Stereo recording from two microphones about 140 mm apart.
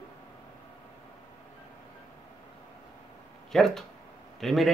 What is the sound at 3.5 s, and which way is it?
Speech, 5° left (ahead or behind).